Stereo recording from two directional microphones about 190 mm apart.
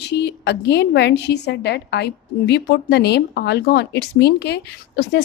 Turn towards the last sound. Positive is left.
turn(degrees=60)  # may be behind; listen again after turning